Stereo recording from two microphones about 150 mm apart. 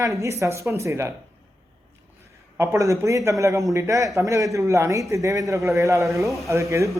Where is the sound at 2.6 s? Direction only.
20° right (ahead or behind).